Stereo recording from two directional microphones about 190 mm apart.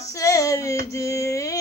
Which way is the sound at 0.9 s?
15° left (ahead or behind).